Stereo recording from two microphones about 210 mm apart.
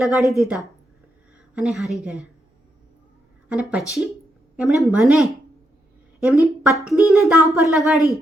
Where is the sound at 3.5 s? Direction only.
5° right (ahead or behind).